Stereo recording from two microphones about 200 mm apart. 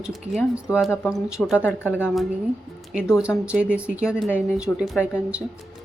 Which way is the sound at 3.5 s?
5° right (ahead or behind).